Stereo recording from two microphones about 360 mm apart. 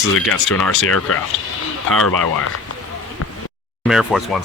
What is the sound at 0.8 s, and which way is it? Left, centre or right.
Speech, left.